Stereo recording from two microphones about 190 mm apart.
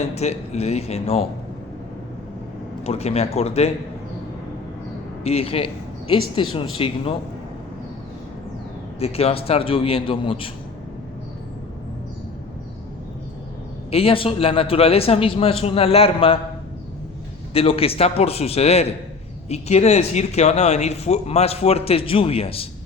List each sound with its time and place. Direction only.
0.0 s speech: 35° left (ahead or behind)
2.8 s speech: 35° left (ahead or behind)
5.2 s a man's voice: 30° left (ahead or behind)
9.0 s a man's voice: 30° left (ahead or behind)
13.9 s speech: 30° left (ahead or behind)
17.5 s speech: 30° left (ahead or behind)